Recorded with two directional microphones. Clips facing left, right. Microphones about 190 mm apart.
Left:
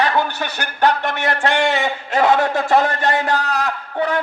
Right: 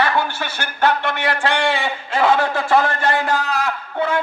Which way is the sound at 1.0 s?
40° left (ahead or behind).